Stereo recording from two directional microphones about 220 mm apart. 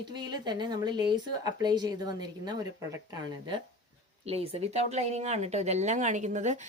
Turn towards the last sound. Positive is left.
turn(degrees=-35)  # may be behind; listen again after turning